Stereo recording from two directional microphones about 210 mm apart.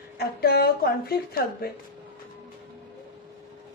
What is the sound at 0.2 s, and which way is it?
A woman's voice, 45° left (ahead or behind).